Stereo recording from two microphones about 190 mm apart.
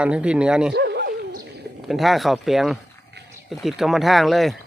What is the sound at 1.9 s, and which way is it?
Speech, centre (ahead or behind).